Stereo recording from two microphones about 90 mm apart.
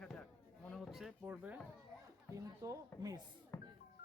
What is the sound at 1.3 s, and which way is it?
Speech, 15° right (ahead or behind).